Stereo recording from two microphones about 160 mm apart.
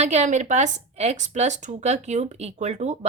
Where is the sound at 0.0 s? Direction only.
45° right (ahead or behind).